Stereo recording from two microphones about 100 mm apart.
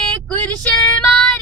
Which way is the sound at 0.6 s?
10° left (ahead or behind).